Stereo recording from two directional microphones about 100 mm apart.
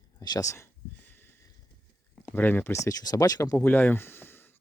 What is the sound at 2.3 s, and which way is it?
Speech, 20° left (ahead or behind).